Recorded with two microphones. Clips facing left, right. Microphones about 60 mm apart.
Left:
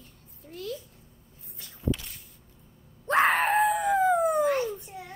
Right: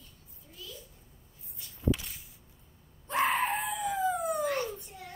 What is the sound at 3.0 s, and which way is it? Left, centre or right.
Screaming, left.